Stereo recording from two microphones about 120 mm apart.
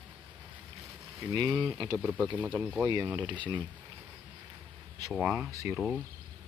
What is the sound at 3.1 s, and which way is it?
Speech, 40° right (ahead or behind).